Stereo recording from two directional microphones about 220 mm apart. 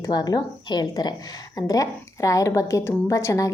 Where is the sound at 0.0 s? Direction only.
15° left (ahead or behind).